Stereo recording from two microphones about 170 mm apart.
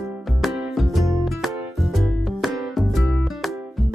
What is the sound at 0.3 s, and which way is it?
Music, centre (ahead or behind).